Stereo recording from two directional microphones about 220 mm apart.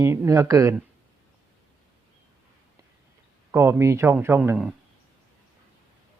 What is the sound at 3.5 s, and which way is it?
Speech, 10° right (ahead or behind).